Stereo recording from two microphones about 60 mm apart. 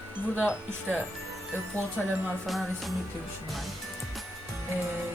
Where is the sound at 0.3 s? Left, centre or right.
Right.